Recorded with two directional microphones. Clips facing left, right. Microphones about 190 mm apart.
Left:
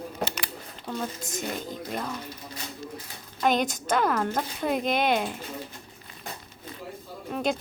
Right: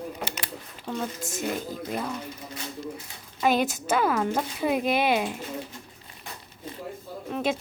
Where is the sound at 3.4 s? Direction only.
5° right (ahead or behind).